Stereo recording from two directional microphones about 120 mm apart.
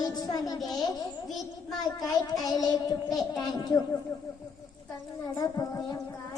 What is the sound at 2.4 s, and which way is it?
Speech, 30° left (ahead or behind).